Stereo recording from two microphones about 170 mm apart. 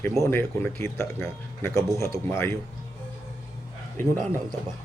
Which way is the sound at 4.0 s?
15° left (ahead or behind).